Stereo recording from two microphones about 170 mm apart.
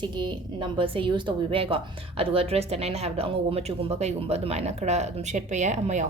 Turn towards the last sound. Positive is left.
turn(degrees=-45)  # may be behind; listen again after turning